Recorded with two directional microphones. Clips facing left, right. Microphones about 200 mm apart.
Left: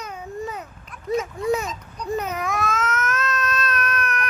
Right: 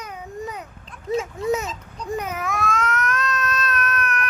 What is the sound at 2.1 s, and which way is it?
Baby cry, 10° right (ahead or behind).